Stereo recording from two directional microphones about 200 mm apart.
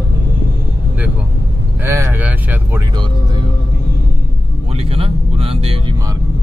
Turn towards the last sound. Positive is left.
turn(degrees=-30)  # may be behind; listen again after turning